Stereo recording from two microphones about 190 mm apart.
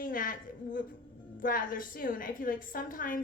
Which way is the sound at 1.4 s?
45° left (ahead or behind).